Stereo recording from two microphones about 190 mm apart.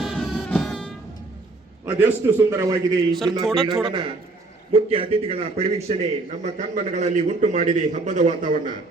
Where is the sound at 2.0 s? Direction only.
15° right (ahead or behind).